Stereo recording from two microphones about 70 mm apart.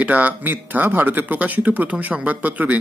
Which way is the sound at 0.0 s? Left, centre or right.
Right.